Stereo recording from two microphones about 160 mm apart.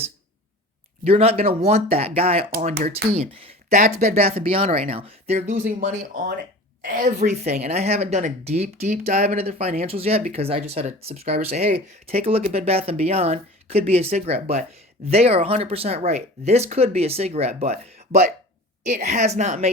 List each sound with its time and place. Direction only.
1.0 s speech: 40° right (ahead or behind)
3.8 s speech: 50° right (ahead or behind)
6.8 s a woman's voice: 60° right (ahead or behind)